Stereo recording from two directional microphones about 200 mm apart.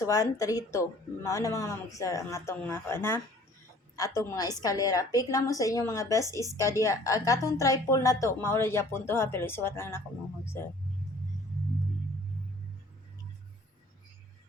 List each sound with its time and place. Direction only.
0.0 s a woman's voice: 15° left (ahead or behind)